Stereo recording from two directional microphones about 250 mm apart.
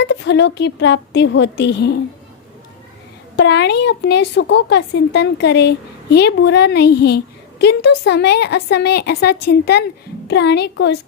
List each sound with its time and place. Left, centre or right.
0.0 s speech: left
3.3 s speech: left